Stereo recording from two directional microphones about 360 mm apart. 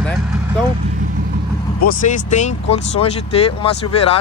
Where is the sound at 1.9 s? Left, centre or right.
Left.